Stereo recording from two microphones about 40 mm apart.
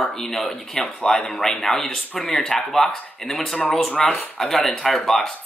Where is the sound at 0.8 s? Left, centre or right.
Left.